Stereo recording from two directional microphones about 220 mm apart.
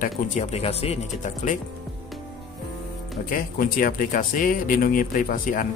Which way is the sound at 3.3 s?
40° left (ahead or behind).